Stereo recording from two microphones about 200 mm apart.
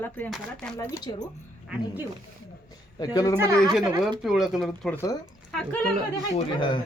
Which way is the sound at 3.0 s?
20° left (ahead or behind).